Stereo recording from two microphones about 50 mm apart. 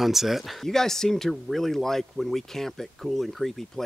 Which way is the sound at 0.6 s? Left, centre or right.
Centre.